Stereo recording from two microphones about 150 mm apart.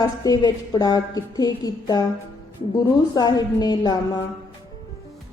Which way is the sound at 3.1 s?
25° left (ahead or behind).